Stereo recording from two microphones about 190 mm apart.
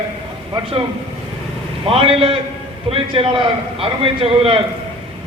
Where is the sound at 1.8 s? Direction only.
30° right (ahead or behind).